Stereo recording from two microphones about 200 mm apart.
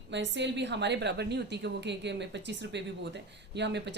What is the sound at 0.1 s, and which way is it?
Speech, 60° right (ahead or behind).